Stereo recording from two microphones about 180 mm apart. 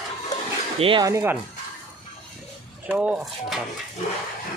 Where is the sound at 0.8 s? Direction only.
30° right (ahead or behind).